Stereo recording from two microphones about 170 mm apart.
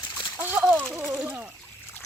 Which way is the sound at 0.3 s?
10° right (ahead or behind).